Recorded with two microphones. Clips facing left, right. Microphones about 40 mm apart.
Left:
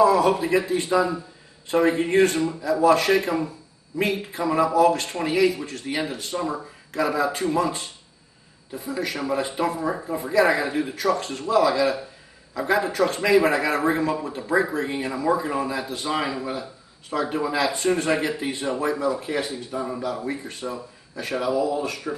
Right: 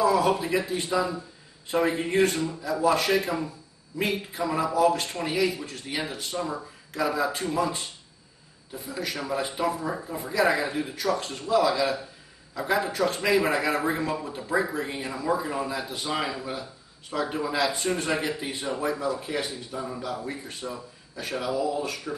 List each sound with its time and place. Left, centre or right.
0.0 s a man's voice: centre